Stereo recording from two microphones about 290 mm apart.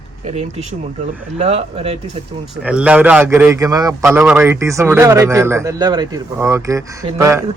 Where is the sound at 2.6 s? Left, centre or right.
Centre.